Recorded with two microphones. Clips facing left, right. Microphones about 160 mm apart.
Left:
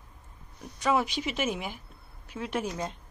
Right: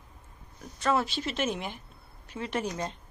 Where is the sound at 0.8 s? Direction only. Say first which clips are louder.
Left 1 dB; 15° left (ahead or behind).